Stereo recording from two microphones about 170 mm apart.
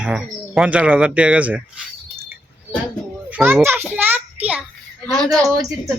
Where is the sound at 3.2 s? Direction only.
10° right (ahead or behind).